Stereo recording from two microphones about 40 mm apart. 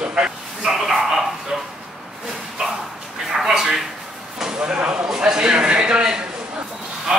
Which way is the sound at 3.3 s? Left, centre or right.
Centre.